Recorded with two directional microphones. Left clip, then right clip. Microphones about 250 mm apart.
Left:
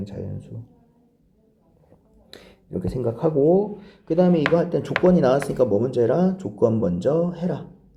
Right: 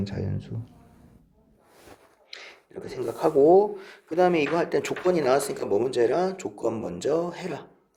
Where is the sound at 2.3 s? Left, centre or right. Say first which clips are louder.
Left 6 dB; right.